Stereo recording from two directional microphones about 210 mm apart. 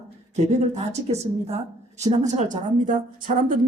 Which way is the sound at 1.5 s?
30° right (ahead or behind).